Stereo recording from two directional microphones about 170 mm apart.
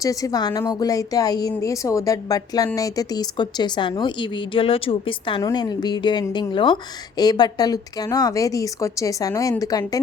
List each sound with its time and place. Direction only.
0.0 s speech: 20° left (ahead or behind)